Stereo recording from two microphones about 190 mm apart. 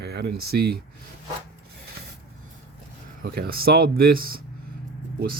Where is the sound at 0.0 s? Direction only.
60° right (ahead or behind).